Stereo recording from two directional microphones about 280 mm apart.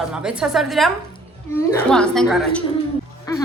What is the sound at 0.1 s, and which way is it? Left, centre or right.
Speech, centre.